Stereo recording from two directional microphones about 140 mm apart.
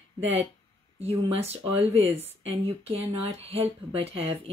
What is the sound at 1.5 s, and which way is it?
Speech, 50° right (ahead or behind).